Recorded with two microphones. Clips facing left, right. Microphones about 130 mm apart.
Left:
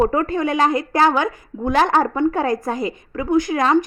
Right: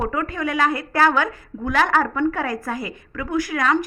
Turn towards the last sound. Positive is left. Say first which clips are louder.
# left 4 dB
turn(degrees=25)  # may be behind; listen again after turning